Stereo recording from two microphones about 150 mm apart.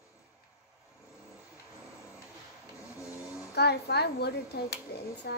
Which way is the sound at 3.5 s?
90° left.